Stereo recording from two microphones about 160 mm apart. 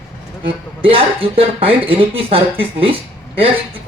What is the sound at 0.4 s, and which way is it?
A man's voice, 35° right (ahead or behind).